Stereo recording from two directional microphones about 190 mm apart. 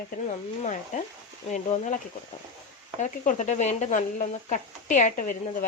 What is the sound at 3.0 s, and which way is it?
Speech, 40° left (ahead or behind).